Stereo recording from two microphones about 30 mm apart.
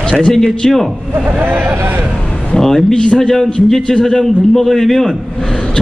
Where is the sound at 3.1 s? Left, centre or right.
Centre.